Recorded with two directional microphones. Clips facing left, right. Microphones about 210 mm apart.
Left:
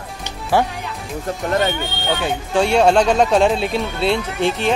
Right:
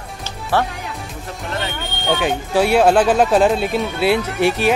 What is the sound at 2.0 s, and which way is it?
Speech, 10° right (ahead or behind).